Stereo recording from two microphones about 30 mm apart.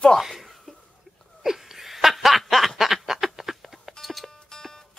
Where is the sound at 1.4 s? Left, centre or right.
Centre.